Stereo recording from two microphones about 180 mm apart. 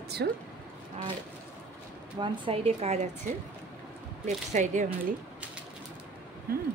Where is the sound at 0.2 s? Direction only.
60° right (ahead or behind).